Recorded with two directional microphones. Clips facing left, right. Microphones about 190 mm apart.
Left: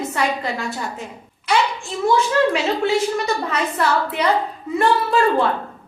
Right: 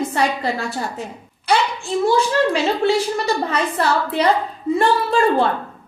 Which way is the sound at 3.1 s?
30° right (ahead or behind).